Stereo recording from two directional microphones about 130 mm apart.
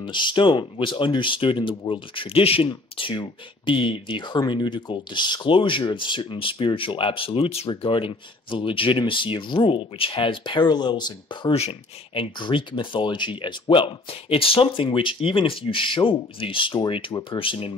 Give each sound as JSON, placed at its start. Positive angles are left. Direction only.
{"t": 0.0, "sound": "speech", "side_deg": 40}
{"t": 11.5, "sound": "speech", "side_deg": 50}